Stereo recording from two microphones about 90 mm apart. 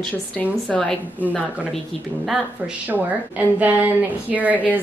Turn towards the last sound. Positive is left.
turn(degrees=-15)  # may be behind; listen again after turning